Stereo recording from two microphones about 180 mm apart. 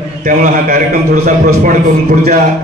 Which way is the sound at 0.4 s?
55° right (ahead or behind).